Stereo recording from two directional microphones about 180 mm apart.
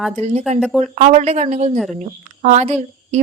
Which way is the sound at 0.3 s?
40° right (ahead or behind).